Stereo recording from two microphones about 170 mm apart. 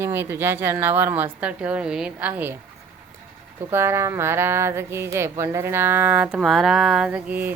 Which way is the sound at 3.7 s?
15° right (ahead or behind).